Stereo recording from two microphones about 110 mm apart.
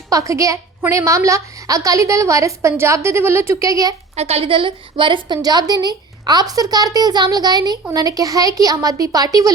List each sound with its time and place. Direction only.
0.1 s a woman's voice: 30° right (ahead or behind)
4.1 s a woman's voice: 70° right (ahead or behind); by 5.4 s 50° right (ahead or behind)
5.4 s a woman's voice: 35° right (ahead or behind)